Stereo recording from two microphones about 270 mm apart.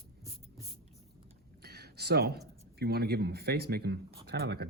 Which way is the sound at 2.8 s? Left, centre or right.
Right.